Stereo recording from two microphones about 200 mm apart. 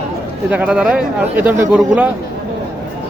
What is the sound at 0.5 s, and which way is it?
Speech, 5° right (ahead or behind).